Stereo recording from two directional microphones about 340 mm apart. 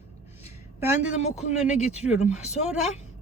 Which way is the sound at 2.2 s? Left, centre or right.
Centre.